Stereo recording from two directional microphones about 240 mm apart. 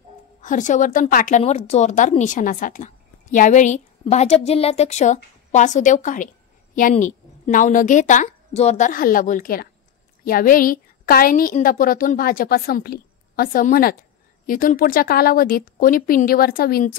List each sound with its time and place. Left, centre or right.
0.4 s a woman's voice: left